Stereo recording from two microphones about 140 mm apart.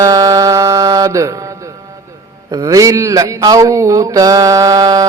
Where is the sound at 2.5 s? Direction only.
25° right (ahead or behind).